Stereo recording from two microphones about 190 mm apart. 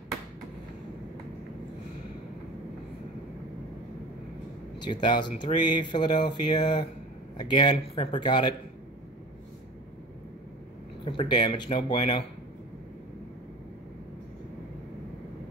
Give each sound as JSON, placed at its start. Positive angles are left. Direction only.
{"t": 4.7, "sound": "speech", "side_deg": 25}
{"t": 11.1, "sound": "speech", "side_deg": 25}